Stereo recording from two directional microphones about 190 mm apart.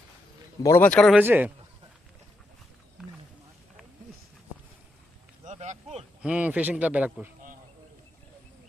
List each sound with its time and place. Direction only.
0.6 s speech: 10° left (ahead or behind)
1.1 s a man's voice: 10° right (ahead or behind)
5.5 s a sound: 35° right (ahead or behind)
6.2 s a man's voice: 5° right (ahead or behind)